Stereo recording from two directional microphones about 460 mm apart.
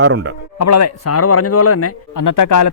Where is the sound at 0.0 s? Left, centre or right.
Right.